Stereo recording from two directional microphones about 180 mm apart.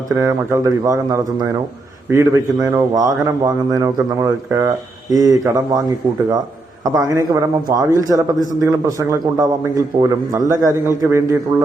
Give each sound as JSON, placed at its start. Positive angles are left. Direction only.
{"t": 0.2, "sound": "a man's voice", "side_deg": -15}
{"t": 6.9, "sound": "a man's voice", "side_deg": -15}